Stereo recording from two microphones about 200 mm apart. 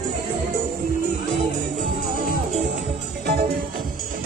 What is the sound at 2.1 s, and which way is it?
Music, 45° right (ahead or behind).